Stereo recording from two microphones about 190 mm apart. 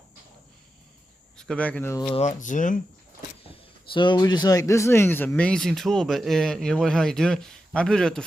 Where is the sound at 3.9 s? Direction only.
25° left (ahead or behind).